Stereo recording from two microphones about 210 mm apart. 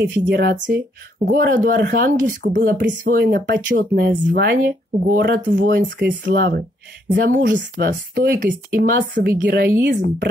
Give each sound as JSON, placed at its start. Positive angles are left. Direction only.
{"t": 0.3, "sound": "speech", "side_deg": -50}